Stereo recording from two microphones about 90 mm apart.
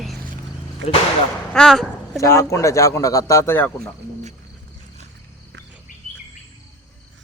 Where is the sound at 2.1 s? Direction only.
35° left (ahead or behind).